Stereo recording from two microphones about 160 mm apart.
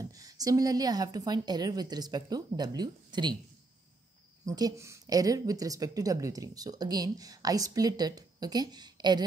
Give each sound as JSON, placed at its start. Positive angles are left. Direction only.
{"t": 0.0, "sound": "a woman's voice", "side_deg": -20}
{"t": 4.5, "sound": "a woman's voice", "side_deg": -20}